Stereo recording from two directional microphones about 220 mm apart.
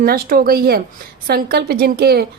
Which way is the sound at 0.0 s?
40° right (ahead or behind).